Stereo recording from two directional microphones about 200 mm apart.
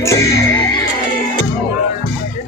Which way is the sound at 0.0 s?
15° left (ahead or behind).